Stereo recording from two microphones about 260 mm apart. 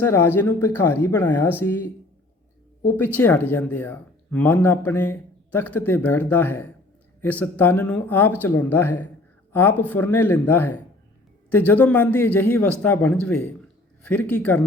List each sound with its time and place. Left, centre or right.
0.0 s speech: centre
2.9 s speech: centre